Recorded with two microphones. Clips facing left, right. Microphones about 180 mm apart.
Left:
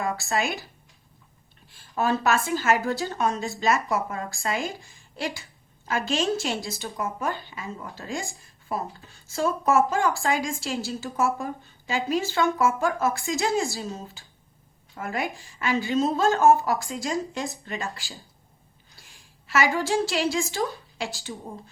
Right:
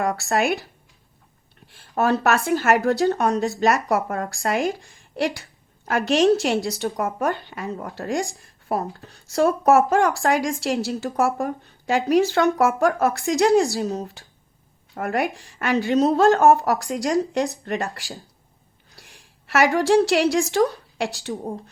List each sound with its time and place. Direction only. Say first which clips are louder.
0.0 s a woman's voice: right 5 dB; 65° right (ahead or behind)